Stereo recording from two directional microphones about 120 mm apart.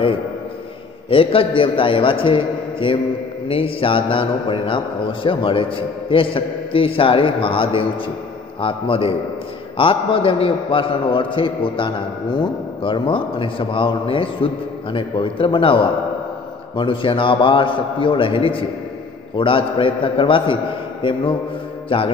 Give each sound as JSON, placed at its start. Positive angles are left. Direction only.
{"t": 1.1, "sound": "a man's voice", "side_deg": 50}